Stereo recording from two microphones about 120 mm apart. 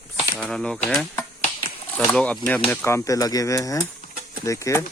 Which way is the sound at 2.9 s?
30° left (ahead or behind).